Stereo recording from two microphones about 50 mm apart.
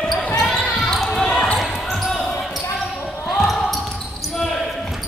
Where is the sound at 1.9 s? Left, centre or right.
Centre.